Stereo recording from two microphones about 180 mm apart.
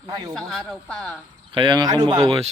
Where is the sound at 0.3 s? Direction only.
5° left (ahead or behind).